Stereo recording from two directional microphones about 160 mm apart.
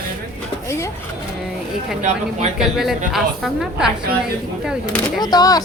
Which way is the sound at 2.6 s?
Centre (ahead or behind).